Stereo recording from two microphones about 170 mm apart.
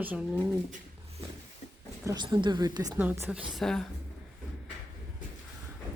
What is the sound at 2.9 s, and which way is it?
Speech, 10° right (ahead or behind).